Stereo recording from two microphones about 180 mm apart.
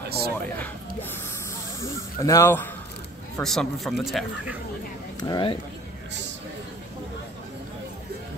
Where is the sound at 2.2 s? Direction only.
15° left (ahead or behind).